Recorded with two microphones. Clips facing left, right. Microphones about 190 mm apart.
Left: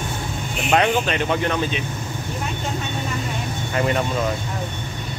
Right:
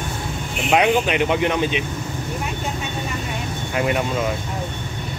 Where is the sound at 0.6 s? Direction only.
10° right (ahead or behind).